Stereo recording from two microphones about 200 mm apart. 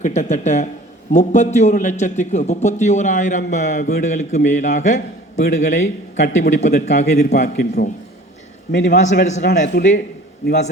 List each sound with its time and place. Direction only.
0.0 s a man's voice: 35° left (ahead or behind)
9.2 s a man's voice: 40° left (ahead or behind)